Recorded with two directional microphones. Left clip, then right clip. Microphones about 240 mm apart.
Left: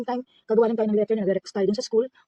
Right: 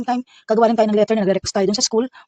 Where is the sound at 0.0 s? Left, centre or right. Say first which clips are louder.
Right 7 dB; right.